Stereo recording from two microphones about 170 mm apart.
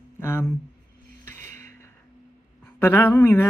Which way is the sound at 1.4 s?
45° right (ahead or behind).